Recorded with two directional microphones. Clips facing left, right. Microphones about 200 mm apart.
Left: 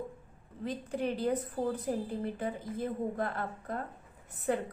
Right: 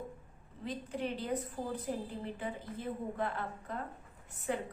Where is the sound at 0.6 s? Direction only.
40° left (ahead or behind).